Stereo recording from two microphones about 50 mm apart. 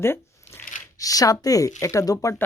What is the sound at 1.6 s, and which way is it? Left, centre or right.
Speech, left.